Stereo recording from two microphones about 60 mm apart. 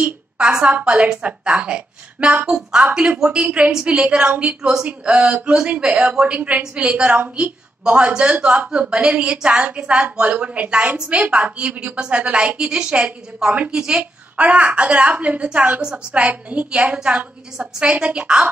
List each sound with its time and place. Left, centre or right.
0.0 s a sound: centre
0.7 s a woman's voice: right
4.6 s a woman's voice: centre
7.2 s a woman's voice: right
7.8 s a woman's voice: centre